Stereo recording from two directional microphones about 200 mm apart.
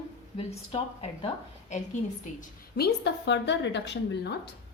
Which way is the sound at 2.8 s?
60° left (ahead or behind).